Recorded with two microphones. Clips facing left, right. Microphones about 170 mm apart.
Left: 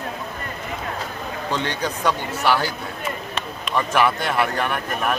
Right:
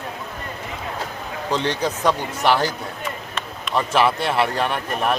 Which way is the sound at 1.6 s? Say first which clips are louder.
Right 3 dB; 35° right (ahead or behind).